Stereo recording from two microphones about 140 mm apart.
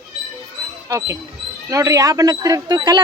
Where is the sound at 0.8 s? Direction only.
20° right (ahead or behind).